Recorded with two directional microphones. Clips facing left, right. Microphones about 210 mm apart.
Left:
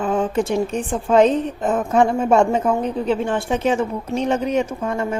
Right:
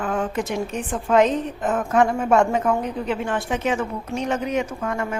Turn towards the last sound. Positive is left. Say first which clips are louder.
# left 3 dB
turn(degrees=30)  # may be behind; listen again after turning